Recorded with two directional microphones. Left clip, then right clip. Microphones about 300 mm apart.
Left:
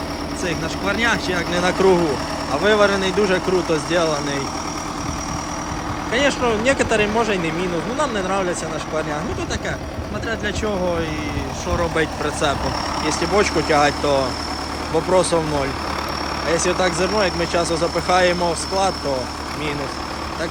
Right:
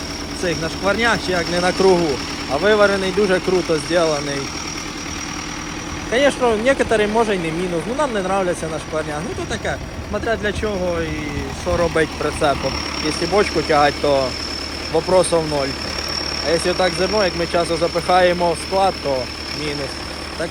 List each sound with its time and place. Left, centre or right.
0.4 s speech: centre
6.1 s speech: centre
11.8 s speech: centre
13.0 s speech: left
13.3 s speech: centre
16.8 s speech: centre